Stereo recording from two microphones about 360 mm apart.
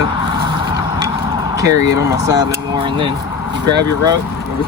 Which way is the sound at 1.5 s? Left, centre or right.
Centre.